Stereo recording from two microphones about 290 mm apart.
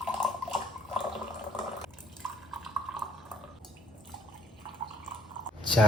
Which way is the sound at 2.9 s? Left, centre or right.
Centre.